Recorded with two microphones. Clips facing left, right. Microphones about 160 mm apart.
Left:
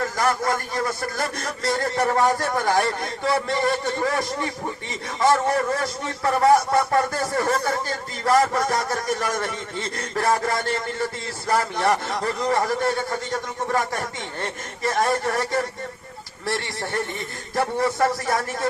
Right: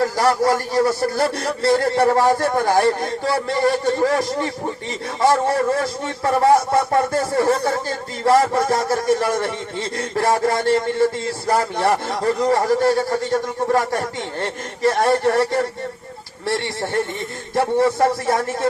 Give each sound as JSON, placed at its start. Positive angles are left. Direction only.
{"t": 0.0, "sound": "a man's voice", "side_deg": -35}